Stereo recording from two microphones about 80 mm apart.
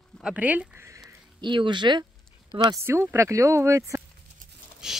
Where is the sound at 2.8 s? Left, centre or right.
Right.